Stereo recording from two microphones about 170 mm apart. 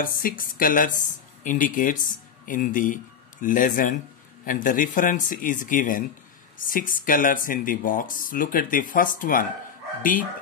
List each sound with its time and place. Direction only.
0.0 s a woman's voice: 55° left (ahead or behind)